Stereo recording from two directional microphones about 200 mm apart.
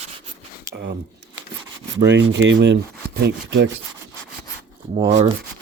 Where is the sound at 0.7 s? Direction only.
55° right (ahead or behind).